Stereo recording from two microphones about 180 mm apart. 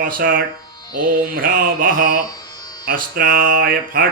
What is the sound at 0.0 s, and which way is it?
Mantra, 50° right (ahead or behind).